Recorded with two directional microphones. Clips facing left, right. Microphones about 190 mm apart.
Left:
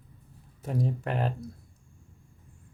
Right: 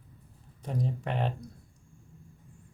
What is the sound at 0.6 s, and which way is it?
Speech, 5° left (ahead or behind).